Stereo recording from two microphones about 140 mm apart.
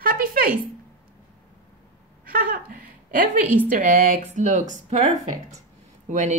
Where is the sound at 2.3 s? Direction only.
90° right.